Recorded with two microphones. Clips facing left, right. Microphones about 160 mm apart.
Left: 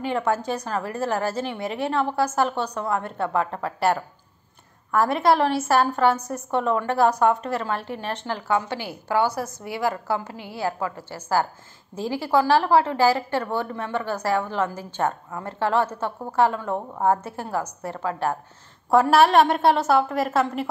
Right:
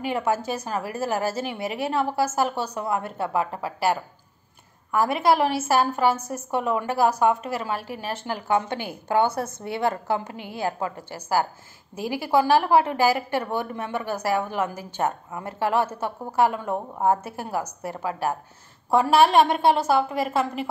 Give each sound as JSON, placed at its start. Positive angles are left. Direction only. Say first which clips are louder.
{"t": 0.0, "sound": "a woman's voice", "louder": "left 1 dB", "side_deg": -10}
{"t": 18.9, "sound": "a woman's voice", "louder": "left 1 dB", "side_deg": 0}